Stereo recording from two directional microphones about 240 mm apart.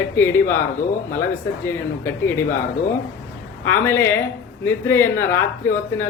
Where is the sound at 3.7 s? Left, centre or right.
Centre.